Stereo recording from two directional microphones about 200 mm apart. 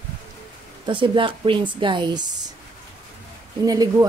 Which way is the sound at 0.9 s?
25° right (ahead or behind).